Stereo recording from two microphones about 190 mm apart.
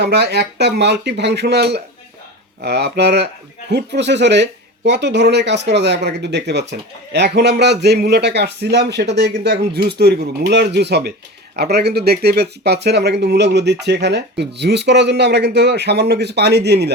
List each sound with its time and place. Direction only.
0.0 s speech: 60° right (ahead or behind)